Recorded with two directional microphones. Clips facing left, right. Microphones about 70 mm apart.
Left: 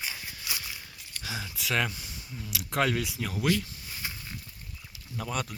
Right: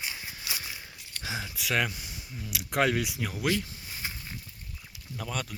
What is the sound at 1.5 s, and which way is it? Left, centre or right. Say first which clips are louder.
Speech: even; centre.